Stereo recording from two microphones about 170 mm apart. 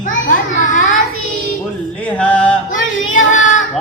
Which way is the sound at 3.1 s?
45° left (ahead or behind).